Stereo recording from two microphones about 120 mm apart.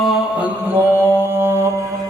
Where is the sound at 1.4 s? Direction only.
20° right (ahead or behind).